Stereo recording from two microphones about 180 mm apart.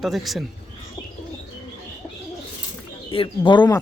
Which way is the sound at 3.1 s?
30° left (ahead or behind).